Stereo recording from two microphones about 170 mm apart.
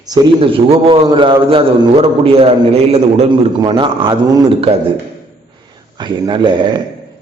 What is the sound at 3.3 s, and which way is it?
A man's voice, 30° right (ahead or behind).